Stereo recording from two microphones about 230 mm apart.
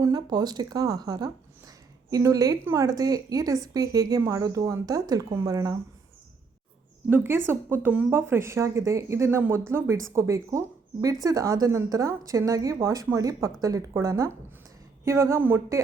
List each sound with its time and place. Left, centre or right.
0.0 s speech: centre
7.1 s speech: centre